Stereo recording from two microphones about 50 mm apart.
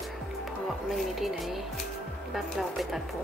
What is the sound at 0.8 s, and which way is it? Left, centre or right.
Speech, centre.